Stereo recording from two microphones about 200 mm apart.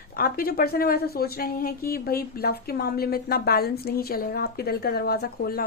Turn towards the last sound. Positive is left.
turn(degrees=50)  # may be behind; listen again after turning